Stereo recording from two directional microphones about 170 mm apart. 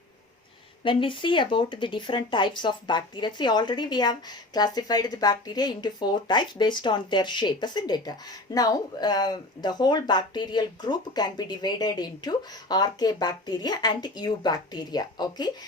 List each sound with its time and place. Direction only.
0.9 s speech: 30° left (ahead or behind)